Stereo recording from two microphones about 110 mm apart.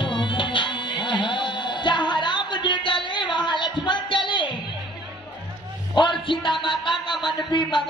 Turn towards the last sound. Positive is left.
turn(degrees=45)  # may be behind; listen again after turning